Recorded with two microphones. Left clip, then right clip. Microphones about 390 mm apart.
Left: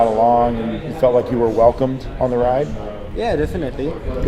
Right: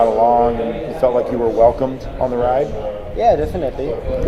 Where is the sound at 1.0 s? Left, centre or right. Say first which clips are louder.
Left 1 dB; centre.